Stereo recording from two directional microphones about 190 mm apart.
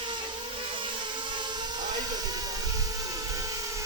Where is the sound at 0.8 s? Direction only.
25° right (ahead or behind).